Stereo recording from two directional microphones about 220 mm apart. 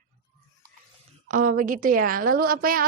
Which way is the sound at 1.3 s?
40° right (ahead or behind).